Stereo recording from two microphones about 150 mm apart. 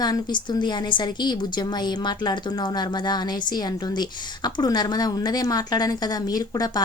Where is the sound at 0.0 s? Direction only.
30° left (ahead or behind).